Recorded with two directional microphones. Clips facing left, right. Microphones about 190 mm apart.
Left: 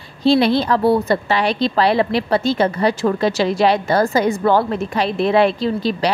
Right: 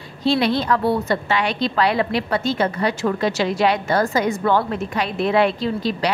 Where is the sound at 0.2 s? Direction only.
30° left (ahead or behind).